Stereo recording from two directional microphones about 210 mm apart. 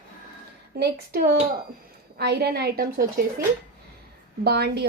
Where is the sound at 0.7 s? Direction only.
50° right (ahead or behind).